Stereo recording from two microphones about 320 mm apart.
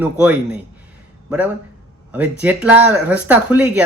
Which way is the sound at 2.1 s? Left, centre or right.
Centre.